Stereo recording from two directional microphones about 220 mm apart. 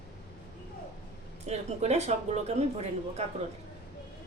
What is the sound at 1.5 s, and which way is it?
Speech, 30° right (ahead or behind).